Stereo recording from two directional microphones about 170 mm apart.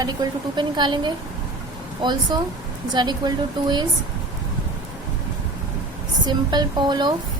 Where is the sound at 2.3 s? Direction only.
25° right (ahead or behind).